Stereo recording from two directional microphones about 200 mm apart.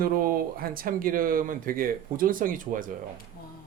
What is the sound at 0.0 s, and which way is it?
Speech, 45° right (ahead or behind).